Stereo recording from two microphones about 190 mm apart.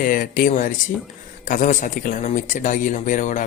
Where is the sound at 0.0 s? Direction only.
45° left (ahead or behind).